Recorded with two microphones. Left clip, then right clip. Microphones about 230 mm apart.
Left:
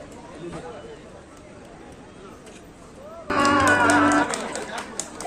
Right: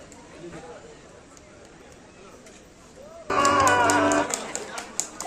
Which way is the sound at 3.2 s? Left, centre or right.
Right.